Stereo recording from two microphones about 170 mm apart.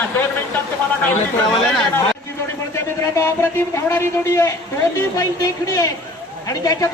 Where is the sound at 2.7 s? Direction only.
15° left (ahead or behind).